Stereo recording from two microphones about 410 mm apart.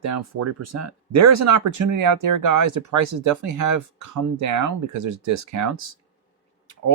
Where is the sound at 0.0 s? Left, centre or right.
Right.